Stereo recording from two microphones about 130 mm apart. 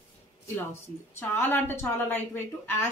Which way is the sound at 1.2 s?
15° left (ahead or behind).